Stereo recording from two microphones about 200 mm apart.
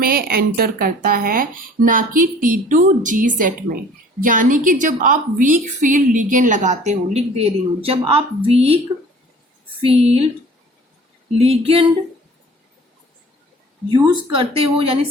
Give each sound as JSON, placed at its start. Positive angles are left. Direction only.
{"t": 0.0, "sound": "a woman's voice", "side_deg": -50}
{"t": 9.8, "sound": "a woman's voice", "side_deg": -30}
{"t": 11.3, "sound": "speech", "side_deg": -30}
{"t": 14.3, "sound": "speech", "side_deg": -25}